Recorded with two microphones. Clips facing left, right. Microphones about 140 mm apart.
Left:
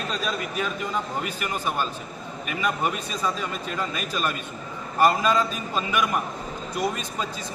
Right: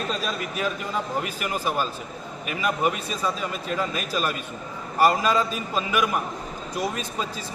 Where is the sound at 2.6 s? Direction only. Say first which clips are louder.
Right 2 dB; 5° right (ahead or behind).